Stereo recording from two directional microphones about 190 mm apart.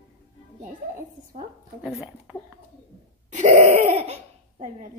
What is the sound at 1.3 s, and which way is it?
Speech, 45° right (ahead or behind).